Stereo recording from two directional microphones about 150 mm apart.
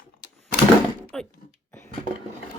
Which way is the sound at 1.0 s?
5° left (ahead or behind).